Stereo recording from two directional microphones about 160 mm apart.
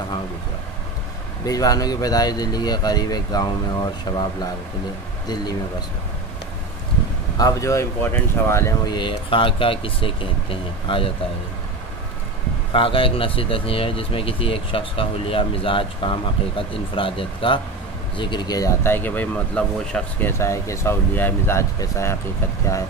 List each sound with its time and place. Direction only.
1.4 s speech: 25° left (ahead or behind)
7.3 s speech: 20° left (ahead or behind)
8.9 s speech: 30° left (ahead or behind)
12.7 s speech: 35° left (ahead or behind); by 22.1 s 15° left (ahead or behind)